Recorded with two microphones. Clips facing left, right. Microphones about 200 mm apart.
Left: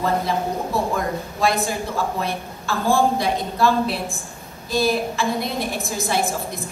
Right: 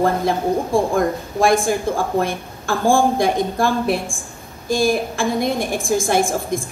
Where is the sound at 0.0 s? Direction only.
50° right (ahead or behind).